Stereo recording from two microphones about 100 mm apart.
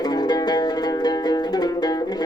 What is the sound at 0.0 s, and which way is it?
Music, 45° left (ahead or behind).